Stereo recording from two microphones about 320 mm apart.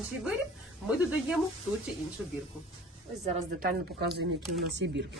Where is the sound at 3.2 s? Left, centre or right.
Right.